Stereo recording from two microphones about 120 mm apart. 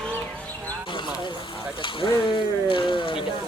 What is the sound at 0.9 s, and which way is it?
Frying, 40° left (ahead or behind).